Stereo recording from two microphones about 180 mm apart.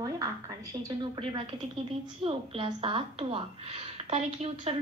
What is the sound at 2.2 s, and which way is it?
A woman's voice, 30° right (ahead or behind).